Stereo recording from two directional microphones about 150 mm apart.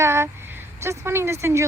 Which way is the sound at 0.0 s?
15° right (ahead or behind).